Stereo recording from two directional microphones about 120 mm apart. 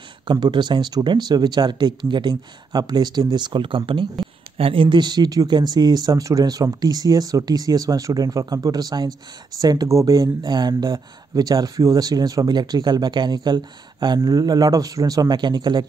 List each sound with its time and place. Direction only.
0.3 s speech: 40° right (ahead or behind)